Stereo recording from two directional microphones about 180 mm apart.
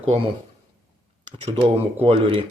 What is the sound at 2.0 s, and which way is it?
Speech, 30° right (ahead or behind).